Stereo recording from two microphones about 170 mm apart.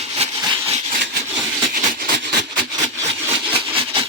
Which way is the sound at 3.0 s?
35° right (ahead or behind).